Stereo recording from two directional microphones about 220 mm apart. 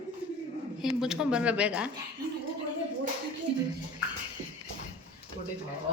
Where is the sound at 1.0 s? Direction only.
5° right (ahead or behind).